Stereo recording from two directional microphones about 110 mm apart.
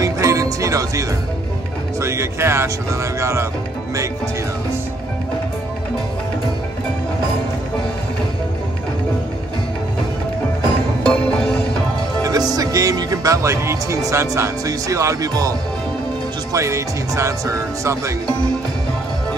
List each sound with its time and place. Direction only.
0.0 s music: 30° right (ahead or behind)
2.0 s speech: 25° right (ahead or behind)
11.1 s music: 5° left (ahead or behind)
12.2 s speech: 35° right (ahead or behind)
16.5 s speech: 30° right (ahead or behind)